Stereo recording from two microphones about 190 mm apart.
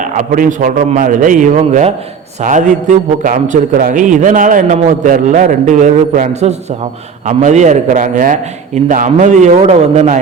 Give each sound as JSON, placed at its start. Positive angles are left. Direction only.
{"t": 0.0, "sound": "a man's voice", "side_deg": -40}